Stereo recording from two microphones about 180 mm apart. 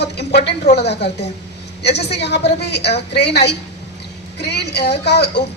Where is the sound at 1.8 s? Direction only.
65° left (ahead or behind).